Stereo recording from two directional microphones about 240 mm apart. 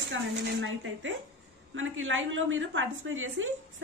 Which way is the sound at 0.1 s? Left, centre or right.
Right.